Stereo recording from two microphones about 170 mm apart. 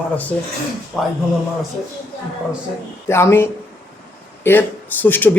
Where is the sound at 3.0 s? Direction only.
15° left (ahead or behind).